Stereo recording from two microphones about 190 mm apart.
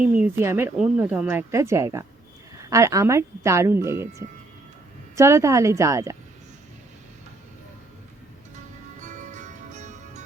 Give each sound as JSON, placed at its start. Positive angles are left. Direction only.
{"t": 0.0, "sound": "speech", "side_deg": -10}
{"t": 5.1, "sound": "speech", "side_deg": -15}
{"t": 9.0, "sound": "music", "side_deg": -40}